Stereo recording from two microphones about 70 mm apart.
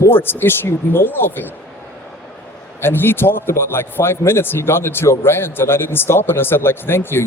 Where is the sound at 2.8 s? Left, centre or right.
Left.